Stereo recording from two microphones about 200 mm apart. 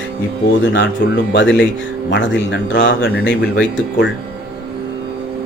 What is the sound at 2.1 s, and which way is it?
Speech, 65° left (ahead or behind).